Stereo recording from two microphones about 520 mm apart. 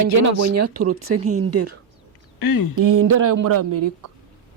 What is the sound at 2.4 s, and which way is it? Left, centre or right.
Speech, left.